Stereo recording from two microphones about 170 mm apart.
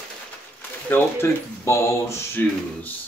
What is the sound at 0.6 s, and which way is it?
Speech, 10° left (ahead or behind).